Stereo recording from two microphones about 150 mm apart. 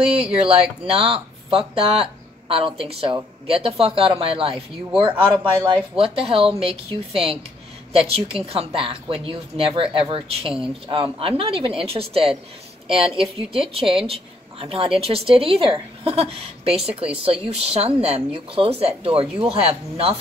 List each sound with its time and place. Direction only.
0.5 s a woman's voice: 35° right (ahead or behind)